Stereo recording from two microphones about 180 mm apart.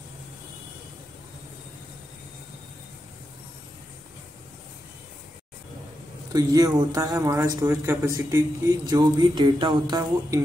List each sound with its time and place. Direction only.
6.3 s speech: 20° right (ahead or behind)